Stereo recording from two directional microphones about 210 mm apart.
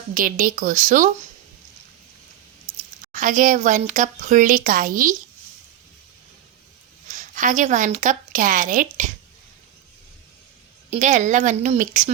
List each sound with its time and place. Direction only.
0.1 s a woman's voice: 40° right (ahead or behind)
3.0 s a woman's voice: 40° right (ahead or behind)
7.1 s a woman's voice: 35° right (ahead or behind)
10.9 s a woman's voice: 35° right (ahead or behind)